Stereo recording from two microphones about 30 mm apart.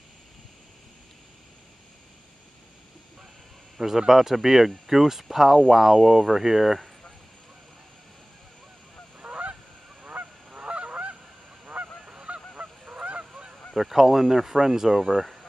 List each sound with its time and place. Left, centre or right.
3.7 s speech: centre
4.1 s honk: centre
9.2 s goose: right
11.6 s goose: right
12.1 s goose: right
13.2 s honk: right
13.7 s honk: centre